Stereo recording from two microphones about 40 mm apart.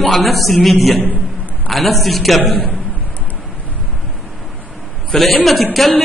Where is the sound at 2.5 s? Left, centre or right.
Left.